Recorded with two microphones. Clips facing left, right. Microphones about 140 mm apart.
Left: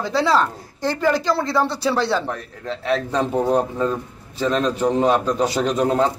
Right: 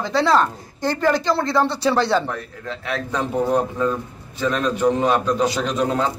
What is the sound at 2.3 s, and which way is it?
Speech, 35° left (ahead or behind).